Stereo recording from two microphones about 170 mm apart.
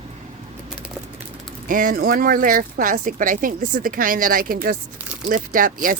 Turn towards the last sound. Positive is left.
turn(degrees=-55)  # may be behind; listen again after turning